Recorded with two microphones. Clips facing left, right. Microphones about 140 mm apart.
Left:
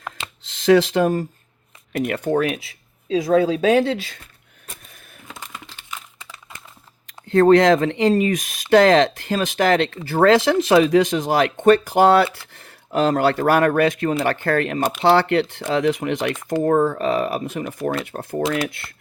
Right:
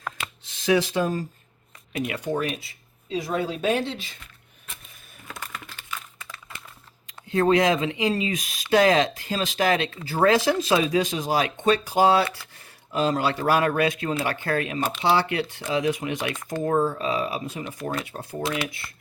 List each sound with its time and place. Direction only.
0.4 s speech: 70° left (ahead or behind); by 4.2 s 90° left
5.3 s a sound: 15° left (ahead or behind)
7.3 s speech: 60° left (ahead or behind)